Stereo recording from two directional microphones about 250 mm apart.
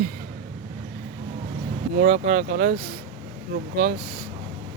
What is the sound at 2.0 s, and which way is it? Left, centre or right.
Speech, right.